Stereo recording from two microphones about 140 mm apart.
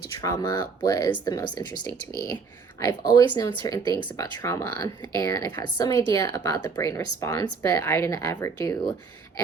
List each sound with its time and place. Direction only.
0.2 s speech: 25° left (ahead or behind)